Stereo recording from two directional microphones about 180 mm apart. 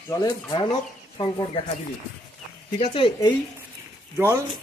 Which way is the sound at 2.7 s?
30° left (ahead or behind).